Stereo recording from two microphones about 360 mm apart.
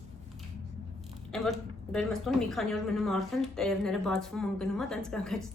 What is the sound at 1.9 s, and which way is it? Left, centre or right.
A woman's voice, centre.